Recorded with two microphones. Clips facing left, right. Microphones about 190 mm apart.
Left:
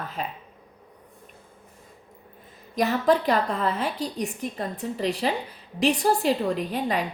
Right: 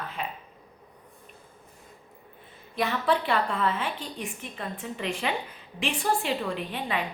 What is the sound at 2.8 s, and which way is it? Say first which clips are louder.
A woman's voice: left 5 dB; 40° left (ahead or behind).